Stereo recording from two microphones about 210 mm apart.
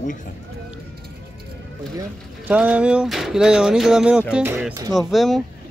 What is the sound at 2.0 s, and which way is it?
Speech, 5° right (ahead or behind).